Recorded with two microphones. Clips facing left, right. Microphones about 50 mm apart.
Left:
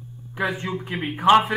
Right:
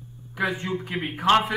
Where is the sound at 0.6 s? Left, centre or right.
Centre.